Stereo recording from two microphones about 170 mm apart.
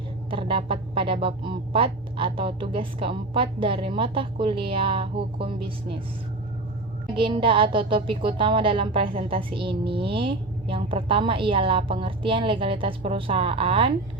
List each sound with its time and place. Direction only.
0.3 s a woman's voice: 30° right (ahead or behind)
7.2 s a woman's voice: 30° right (ahead or behind)